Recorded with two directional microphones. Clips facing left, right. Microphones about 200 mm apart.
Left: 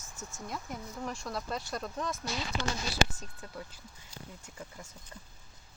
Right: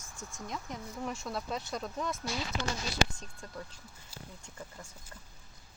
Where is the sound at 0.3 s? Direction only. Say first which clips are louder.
Even; 5° left (ahead or behind).